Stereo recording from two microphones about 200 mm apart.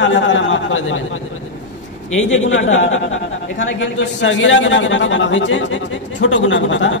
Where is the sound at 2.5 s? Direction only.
70° left (ahead or behind).